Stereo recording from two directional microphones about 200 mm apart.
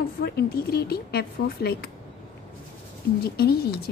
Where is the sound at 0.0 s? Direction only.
50° left (ahead or behind).